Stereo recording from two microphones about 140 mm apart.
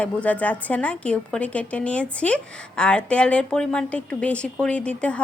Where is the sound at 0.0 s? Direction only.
10° left (ahead or behind).